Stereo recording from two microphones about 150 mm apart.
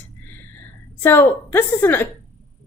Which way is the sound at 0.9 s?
15° left (ahead or behind).